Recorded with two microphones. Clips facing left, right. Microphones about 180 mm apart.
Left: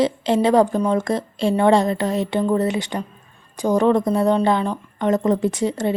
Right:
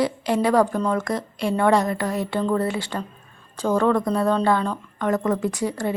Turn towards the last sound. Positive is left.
turn(degrees=25)  # may be behind; listen again after turning